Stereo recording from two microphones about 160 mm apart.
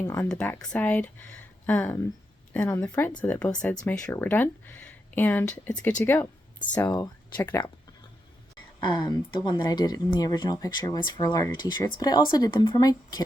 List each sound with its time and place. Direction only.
0.2 s speech: 5° left (ahead or behind)
7.3 s speech: 10° left (ahead or behind)
8.8 s speech: 25° left (ahead or behind)